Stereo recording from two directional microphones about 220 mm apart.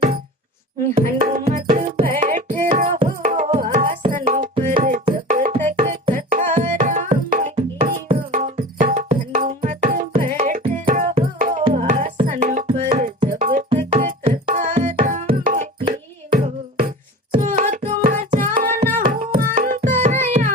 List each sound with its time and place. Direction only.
0.9 s music: 40° right (ahead or behind)
18.9 s carnatic music: 40° right (ahead or behind)
19.5 s music: 40° right (ahead or behind)